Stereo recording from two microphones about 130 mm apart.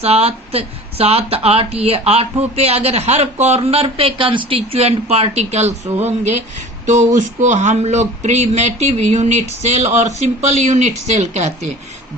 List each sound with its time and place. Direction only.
0.0 s a man's voice: 50° right (ahead or behind)
6.8 s a man's voice: 70° right (ahead or behind)